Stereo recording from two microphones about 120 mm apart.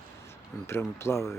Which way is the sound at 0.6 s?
20° left (ahead or behind).